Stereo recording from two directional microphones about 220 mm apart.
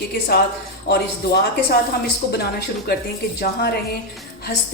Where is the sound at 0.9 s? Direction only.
45° left (ahead or behind).